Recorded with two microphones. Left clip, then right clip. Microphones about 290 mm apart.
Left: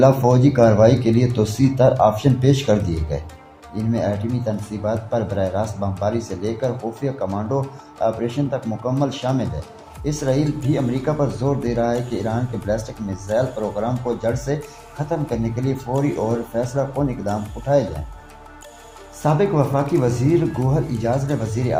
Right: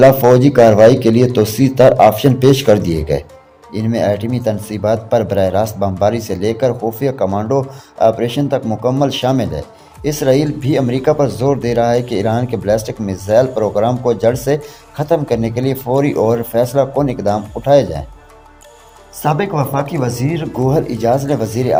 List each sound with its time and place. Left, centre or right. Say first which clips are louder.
0.2 s speech: right 7 dB; right
19.2 s speech: right 2 dB; right